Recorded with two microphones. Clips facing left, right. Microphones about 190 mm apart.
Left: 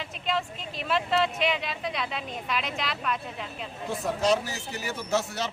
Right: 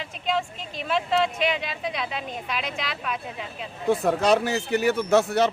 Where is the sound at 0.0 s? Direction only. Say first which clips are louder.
Right 3 dB; centre (ahead or behind).